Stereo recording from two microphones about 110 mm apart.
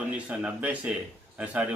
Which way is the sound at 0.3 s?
15° right (ahead or behind).